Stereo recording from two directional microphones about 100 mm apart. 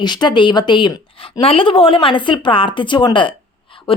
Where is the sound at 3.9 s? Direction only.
65° left (ahead or behind).